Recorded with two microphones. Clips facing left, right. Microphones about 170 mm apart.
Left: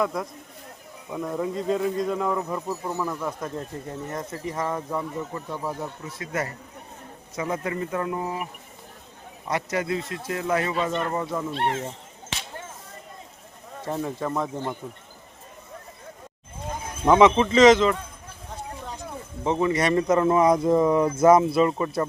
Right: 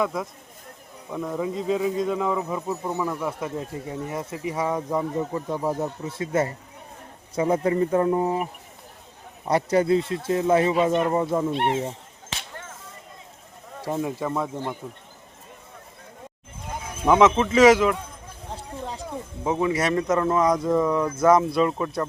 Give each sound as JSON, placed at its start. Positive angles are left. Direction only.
{"t": 0.0, "sound": "speech", "side_deg": 0}
{"t": 5.3, "sound": "speech", "side_deg": -25}
{"t": 9.5, "sound": "speech", "side_deg": -30}
{"t": 13.8, "sound": "speech", "side_deg": -10}
{"t": 17.0, "sound": "speech", "side_deg": -5}
{"t": 19.5, "sound": "speech", "side_deg": -5}